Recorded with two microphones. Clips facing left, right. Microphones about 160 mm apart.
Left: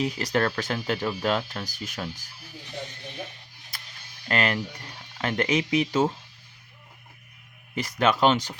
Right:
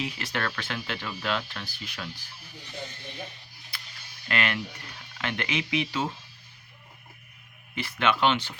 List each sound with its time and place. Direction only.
0.0 s speech: 40° left (ahead or behind)
3.7 s a sound: 45° left (ahead or behind)
4.3 s speech: 35° left (ahead or behind)
7.8 s speech: 40° left (ahead or behind)